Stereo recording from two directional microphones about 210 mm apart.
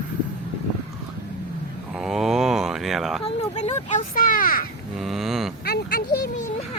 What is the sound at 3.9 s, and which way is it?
Speech, 40° left (ahead or behind).